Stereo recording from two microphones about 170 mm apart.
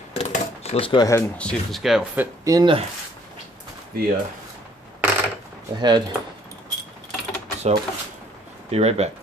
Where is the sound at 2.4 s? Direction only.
20° right (ahead or behind).